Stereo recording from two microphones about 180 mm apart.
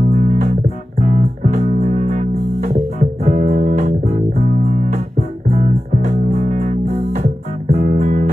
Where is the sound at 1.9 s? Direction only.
50° right (ahead or behind).